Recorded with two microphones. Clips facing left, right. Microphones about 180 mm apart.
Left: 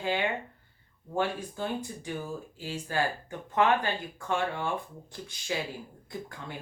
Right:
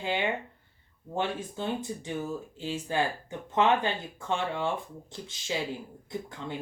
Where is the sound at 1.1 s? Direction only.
20° right (ahead or behind).